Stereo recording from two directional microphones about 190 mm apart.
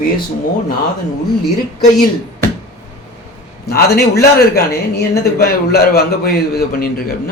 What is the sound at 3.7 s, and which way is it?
A man's voice, 55° left (ahead or behind).